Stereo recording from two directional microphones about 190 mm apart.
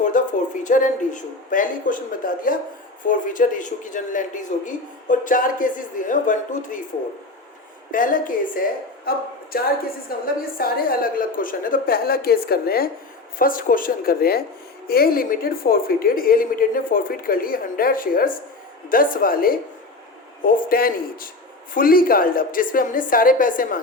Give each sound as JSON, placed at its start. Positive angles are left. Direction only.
{"t": 0.0, "sound": "speech", "side_deg": 40}
{"t": 7.9, "sound": "speech", "side_deg": 45}